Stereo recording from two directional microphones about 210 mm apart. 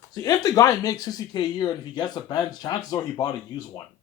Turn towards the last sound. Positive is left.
turn(degrees=15)  # may be behind; listen again after turning